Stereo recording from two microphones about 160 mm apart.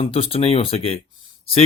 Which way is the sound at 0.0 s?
35° left (ahead or behind).